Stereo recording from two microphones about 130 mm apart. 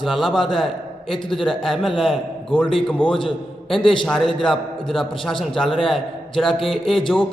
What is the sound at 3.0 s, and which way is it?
Speech, 40° left (ahead or behind).